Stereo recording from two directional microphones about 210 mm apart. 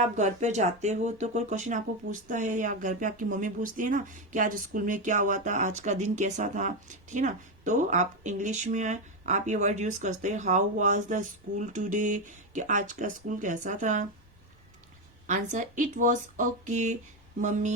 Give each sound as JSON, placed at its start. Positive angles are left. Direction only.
{"t": 0.2, "sound": "speech", "side_deg": -35}
{"t": 15.3, "sound": "speech", "side_deg": -35}